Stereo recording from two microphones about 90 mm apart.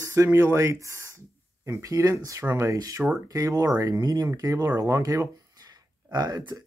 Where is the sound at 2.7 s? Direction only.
40° right (ahead or behind).